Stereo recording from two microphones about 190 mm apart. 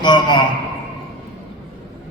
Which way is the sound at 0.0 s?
25° left (ahead or behind).